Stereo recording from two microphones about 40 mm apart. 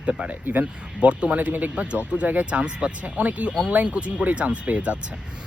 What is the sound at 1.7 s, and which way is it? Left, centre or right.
Speech, right.